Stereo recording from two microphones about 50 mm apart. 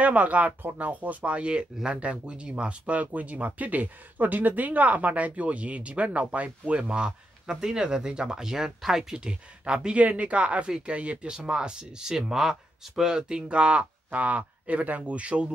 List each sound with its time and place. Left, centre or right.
0.0 s speech: right
6.8 s speech: centre
10.0 s speech: right